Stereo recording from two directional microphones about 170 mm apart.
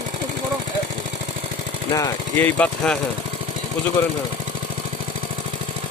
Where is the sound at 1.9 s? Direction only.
20° left (ahead or behind).